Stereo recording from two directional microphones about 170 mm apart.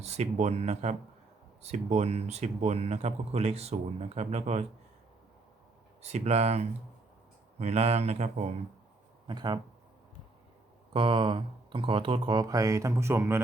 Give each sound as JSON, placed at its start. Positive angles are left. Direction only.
{"t": 0.0, "sound": "speech", "side_deg": -40}
{"t": 6.0, "sound": "speech", "side_deg": -40}
{"t": 9.2, "sound": "speech", "side_deg": -25}
{"t": 10.9, "sound": "speech", "side_deg": -30}